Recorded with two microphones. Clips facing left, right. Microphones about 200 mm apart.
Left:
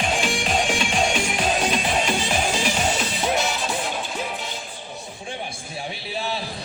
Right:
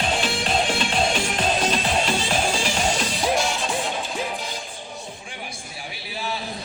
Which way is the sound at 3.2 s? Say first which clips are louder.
Right 1 dB; centre (ahead or behind).